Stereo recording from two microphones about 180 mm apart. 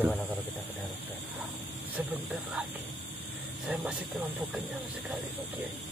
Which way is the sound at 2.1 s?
10° right (ahead or behind).